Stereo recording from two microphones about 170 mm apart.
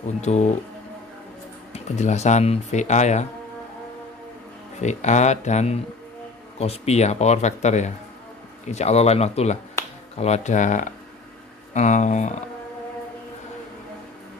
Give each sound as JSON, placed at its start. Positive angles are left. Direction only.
{"t": 0.2, "sound": "speech", "side_deg": 40}
{"t": 1.7, "sound": "speech", "side_deg": 40}
{"t": 4.7, "sound": "speech", "side_deg": 45}